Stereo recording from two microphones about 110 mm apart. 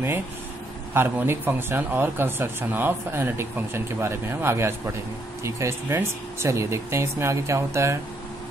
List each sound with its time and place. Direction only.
0.9 s speech: 20° right (ahead or behind)